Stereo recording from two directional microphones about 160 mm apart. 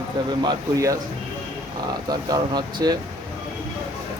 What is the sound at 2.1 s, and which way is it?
Speech, 25° right (ahead or behind).